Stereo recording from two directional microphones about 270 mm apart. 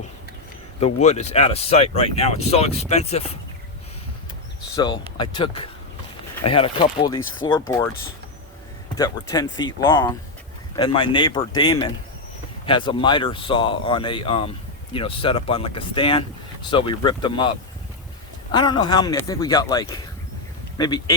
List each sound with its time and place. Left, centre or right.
1.0 s speech: left
4.8 s speech: centre
9.0 s speech: centre
18.5 s speech: centre